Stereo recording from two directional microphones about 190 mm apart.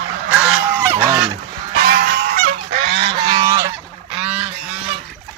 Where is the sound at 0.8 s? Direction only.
20° right (ahead or behind).